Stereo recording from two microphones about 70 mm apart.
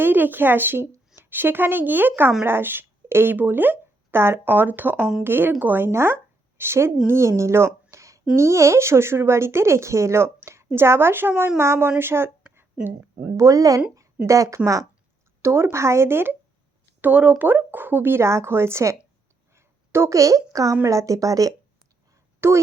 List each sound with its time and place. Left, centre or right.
0.0 s speech: right
13.3 s speech: right
15.4 s speech: right
17.0 s speech: centre; by 18.9 s right
19.5 s a sound: right
20.5 s a woman's voice: right
22.4 s speech: right